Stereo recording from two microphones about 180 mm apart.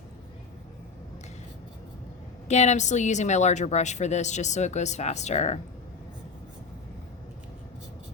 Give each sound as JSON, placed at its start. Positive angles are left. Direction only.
{"t": 2.5, "sound": "a woman's voice", "side_deg": 40}